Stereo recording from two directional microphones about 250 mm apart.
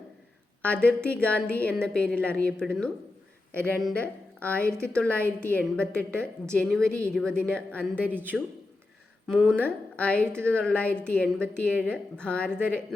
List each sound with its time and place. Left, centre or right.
0.6 s a woman's voice: centre
4.6 s a woman's voice: centre
4.9 s a woman's voice: centre